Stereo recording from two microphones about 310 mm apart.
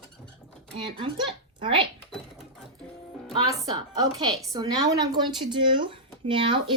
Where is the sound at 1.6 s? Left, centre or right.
Centre.